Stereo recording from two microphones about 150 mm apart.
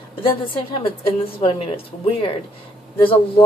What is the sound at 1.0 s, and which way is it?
A woman's voice, 40° left (ahead or behind).